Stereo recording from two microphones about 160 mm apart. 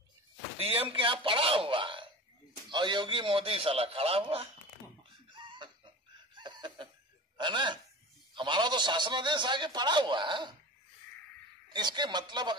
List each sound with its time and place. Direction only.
0.6 s a man's voice: 35° right (ahead or behind)
5.3 s chicken: 30° right (ahead or behind)
6.3 s a sound: 30° right (ahead or behind)
7.3 s a man's voice: 30° right (ahead or behind)
11.7 s a man's voice: 25° right (ahead or behind)